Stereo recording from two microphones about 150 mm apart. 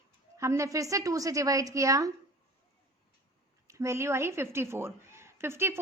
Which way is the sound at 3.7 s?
20° right (ahead or behind).